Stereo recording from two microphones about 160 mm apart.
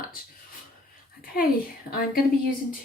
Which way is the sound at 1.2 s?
65° left (ahead or behind).